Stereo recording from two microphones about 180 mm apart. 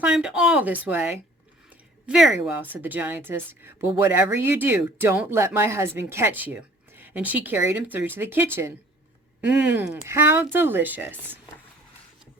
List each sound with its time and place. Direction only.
0.0 s speech: 5° right (ahead or behind)